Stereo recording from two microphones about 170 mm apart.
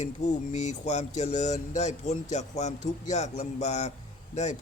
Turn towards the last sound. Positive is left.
turn(degrees=40)  # may be behind; listen again after turning